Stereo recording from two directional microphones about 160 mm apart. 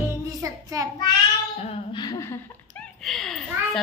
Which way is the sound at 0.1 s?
20° right (ahead or behind).